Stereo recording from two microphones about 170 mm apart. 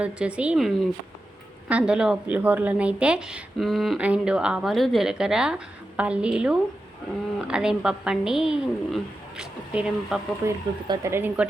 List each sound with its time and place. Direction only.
0.0 s a woman's voice: 5° right (ahead or behind)
10.4 s speech: 15° right (ahead or behind)